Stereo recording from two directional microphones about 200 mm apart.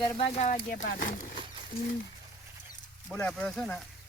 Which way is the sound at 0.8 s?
50° left (ahead or behind).